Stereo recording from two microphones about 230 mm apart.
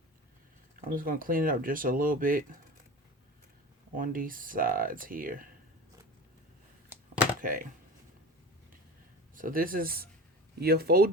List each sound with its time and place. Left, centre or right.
0.9 s speech: right
3.9 s speech: right
7.4 s speech: right
9.3 s speech: right